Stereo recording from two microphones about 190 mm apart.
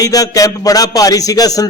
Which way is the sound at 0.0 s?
20° left (ahead or behind).